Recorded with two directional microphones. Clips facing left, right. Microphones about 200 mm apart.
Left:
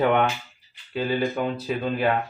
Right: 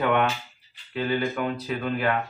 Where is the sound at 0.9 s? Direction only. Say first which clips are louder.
Left 2 dB; 25° left (ahead or behind).